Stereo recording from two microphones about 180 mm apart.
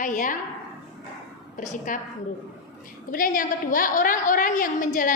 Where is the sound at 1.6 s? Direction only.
45° left (ahead or behind).